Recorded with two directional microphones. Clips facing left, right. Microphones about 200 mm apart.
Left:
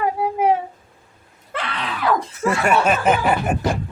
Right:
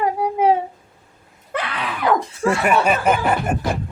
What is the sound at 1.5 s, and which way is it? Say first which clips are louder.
Screaming: right 2 dB; 15° right (ahead or behind).